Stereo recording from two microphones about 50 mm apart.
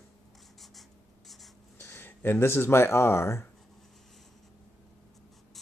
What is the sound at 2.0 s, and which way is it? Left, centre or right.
Speech, left.